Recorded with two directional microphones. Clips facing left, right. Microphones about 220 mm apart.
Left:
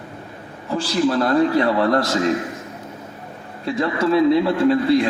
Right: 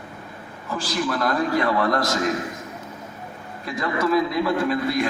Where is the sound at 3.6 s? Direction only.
30° left (ahead or behind).